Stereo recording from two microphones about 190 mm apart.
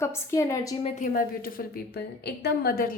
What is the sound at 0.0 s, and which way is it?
Speech, 15° left (ahead or behind).